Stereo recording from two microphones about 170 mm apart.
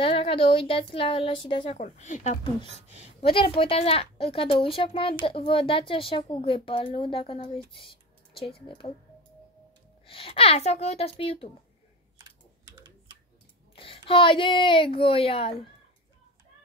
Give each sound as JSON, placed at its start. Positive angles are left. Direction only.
{"t": 0.0, "sound": "speech", "side_deg": 35}
{"t": 1.8, "sound": "speech", "side_deg": 45}
{"t": 10.0, "sound": "speech", "side_deg": 35}
{"t": 13.7, "sound": "speech", "side_deg": 30}